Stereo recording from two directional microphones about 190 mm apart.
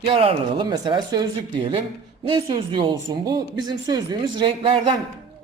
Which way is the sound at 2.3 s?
25° right (ahead or behind).